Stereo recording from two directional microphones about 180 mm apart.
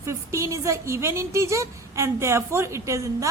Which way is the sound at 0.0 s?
15° right (ahead or behind).